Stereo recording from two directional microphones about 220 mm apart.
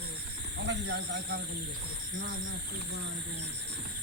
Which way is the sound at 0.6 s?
50° right (ahead or behind).